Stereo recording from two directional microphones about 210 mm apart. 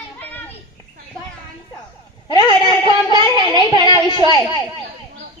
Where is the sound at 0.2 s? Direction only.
10° left (ahead or behind).